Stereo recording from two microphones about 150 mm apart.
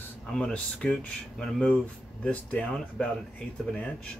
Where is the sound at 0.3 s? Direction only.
5° left (ahead or behind).